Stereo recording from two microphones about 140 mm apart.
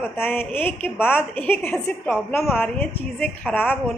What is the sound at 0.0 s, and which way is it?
A woman's voice, 15° left (ahead or behind).